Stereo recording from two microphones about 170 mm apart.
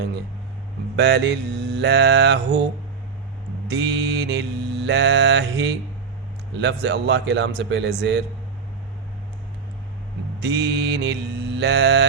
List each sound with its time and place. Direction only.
0.9 s mantra: 85° right
3.7 s mantra: 90° right
10.4 s mantra: 85° right